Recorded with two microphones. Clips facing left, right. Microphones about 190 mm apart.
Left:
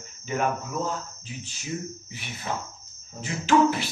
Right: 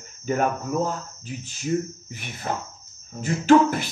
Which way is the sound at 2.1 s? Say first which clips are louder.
Right 4 dB; 50° right (ahead or behind).